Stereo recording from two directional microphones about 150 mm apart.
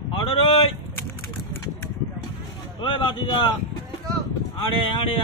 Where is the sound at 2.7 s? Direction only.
35° left (ahead or behind).